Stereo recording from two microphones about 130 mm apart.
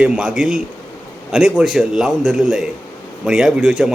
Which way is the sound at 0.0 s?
5° right (ahead or behind).